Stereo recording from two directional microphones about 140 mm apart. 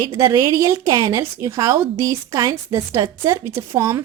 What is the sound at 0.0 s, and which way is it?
A woman's voice, 25° right (ahead or behind).